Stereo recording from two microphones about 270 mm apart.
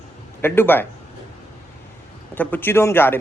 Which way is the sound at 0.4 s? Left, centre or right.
Centre.